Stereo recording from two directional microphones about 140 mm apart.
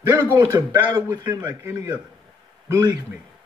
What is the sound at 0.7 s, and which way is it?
Speech, 20° right (ahead or behind).